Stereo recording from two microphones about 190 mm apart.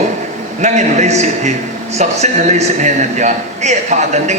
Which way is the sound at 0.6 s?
40° right (ahead or behind).